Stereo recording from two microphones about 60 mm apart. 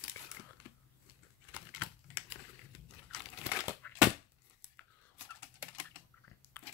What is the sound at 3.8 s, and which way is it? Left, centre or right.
Crushing, left.